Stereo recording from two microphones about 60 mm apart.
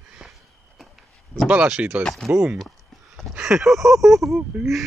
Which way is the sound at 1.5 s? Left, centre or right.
Right.